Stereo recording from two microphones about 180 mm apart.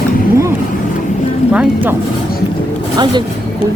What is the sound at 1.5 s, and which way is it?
Speech, 5° right (ahead or behind).